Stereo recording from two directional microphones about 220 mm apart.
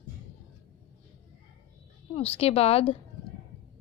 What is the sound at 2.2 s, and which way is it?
Speech, 25° left (ahead or behind).